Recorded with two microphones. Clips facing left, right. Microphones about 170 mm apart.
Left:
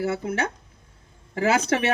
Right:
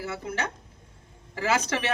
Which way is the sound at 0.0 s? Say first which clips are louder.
Left 6 dB; 50° left (ahead or behind).